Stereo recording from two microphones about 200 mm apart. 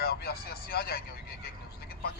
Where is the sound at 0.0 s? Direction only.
50° left (ahead or behind).